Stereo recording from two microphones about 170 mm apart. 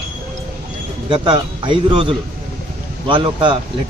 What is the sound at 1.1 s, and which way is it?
Speech, 30° right (ahead or behind).